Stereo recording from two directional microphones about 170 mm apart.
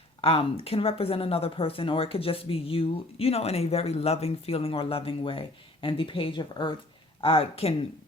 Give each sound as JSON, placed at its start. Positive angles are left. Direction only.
{"t": 0.2, "sound": "speech", "side_deg": 35}